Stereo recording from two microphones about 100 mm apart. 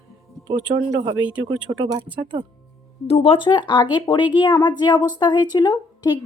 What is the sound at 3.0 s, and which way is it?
Speech, 80° left.